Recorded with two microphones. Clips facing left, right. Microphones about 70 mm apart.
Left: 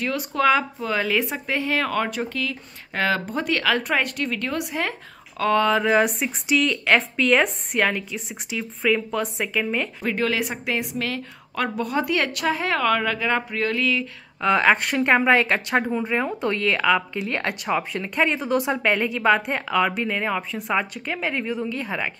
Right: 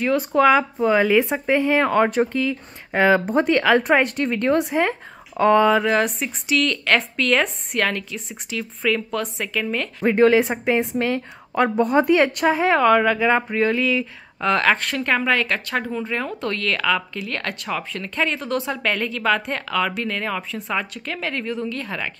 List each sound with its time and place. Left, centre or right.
0.0 s speech: right
5.4 s speech: centre
5.7 s speech: centre
10.0 s a woman's voice: right
11.7 s speech: right; by 14.0 s centre
14.4 s speech: centre
15.0 s a woman's voice: left